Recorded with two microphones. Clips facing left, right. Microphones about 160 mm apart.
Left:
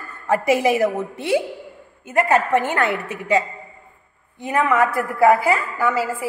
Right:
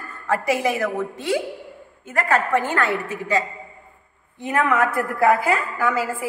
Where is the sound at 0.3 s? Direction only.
20° left (ahead or behind).